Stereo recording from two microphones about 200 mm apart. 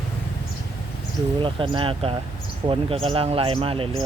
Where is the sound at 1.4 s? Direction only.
25° right (ahead or behind).